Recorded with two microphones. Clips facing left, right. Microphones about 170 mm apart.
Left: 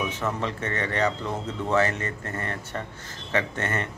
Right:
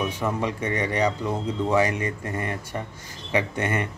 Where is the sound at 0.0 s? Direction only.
10° right (ahead or behind).